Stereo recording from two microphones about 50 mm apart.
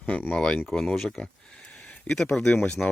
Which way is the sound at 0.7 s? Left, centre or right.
Centre.